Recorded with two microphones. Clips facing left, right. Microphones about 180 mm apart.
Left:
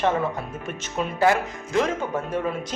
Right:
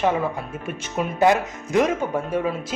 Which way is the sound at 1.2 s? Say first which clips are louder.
Right 2 dB; 20° right (ahead or behind).